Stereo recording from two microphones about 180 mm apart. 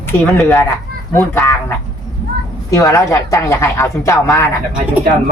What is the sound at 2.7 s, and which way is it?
A man's voice, 20° left (ahead or behind).